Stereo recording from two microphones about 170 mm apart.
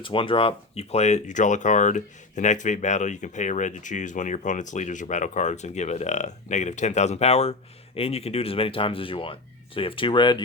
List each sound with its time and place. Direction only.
0.0 s speech: 30° left (ahead or behind)